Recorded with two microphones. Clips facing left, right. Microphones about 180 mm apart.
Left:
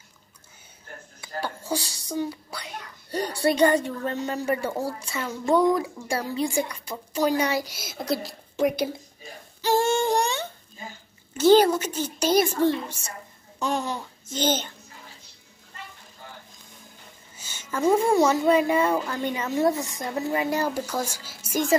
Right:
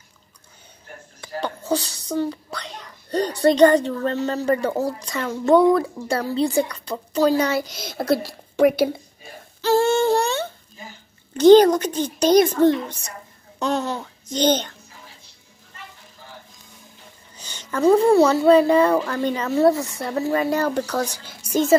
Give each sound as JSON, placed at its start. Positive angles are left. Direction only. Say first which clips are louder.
{"t": 1.2, "sound": "a woman's voice", "louder": "right 4 dB", "side_deg": 10}
{"t": 9.6, "sound": "a sound", "louder": "right 4 dB", "side_deg": 15}
{"t": 11.3, "sound": "a woman's voice", "louder": "right 6 dB", "side_deg": 5}
{"t": 12.5, "sound": "a child's voice", "louder": "right 6 dB", "side_deg": -15}
{"t": 13.6, "sound": "a woman's voice", "louder": "right 4 dB", "side_deg": 10}
{"t": 17.4, "sound": "a woman's voice", "louder": "right 5 dB", "side_deg": 5}